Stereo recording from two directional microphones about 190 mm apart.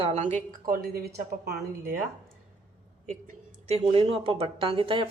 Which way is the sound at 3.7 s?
30° right (ahead or behind).